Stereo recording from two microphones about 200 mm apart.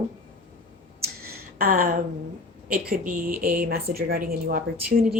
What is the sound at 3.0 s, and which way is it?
Speech, 45° right (ahead or behind).